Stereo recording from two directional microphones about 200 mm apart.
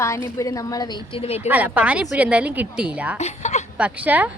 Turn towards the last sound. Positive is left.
turn(degrees=-10)  # may be behind; listen again after turning